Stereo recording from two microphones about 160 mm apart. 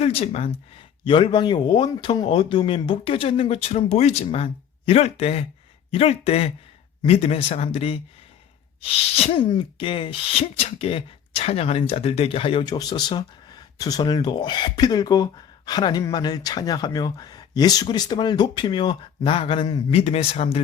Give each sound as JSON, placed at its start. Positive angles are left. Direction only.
{"t": 0.0, "sound": "speech", "side_deg": 40}
{"t": 19.9, "sound": "speech", "side_deg": 40}